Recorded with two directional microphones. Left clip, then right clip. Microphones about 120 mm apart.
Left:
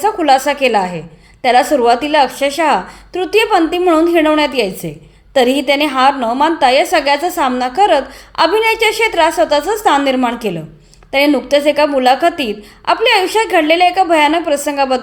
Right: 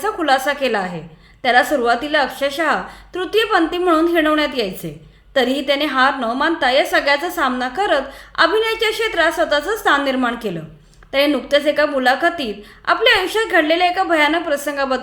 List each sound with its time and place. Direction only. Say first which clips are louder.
0.0 s a woman's voice: left 5 dB; 25° left (ahead or behind)